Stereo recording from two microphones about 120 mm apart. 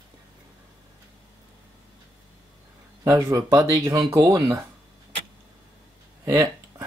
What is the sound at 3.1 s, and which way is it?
Speech, 25° right (ahead or behind).